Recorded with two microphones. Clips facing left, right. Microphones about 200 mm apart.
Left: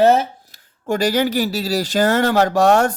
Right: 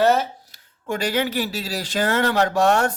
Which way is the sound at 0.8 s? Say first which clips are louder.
Left 5 dB; 40° left (ahead or behind).